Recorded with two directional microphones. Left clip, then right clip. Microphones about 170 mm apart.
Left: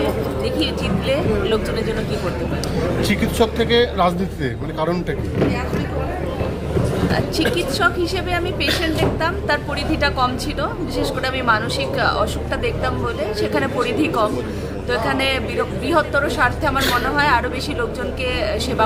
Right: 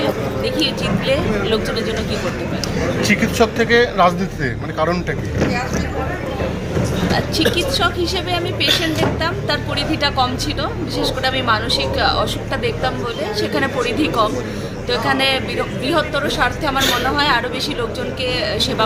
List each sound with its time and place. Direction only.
0.0 s speech: 40° left (ahead or behind)
1.1 s a woman's voice: 10° left (ahead or behind)
3.0 s a woman's voice: 10° left (ahead or behind)
10.0 s a woman's voice: 10° left (ahead or behind)
13.5 s a woman's voice: 5° left (ahead or behind)